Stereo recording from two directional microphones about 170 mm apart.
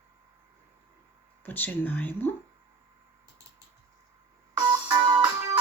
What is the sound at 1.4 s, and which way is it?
Speech, 10° left (ahead or behind).